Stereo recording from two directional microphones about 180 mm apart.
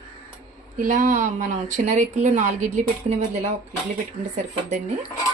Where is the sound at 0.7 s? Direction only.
45° right (ahead or behind).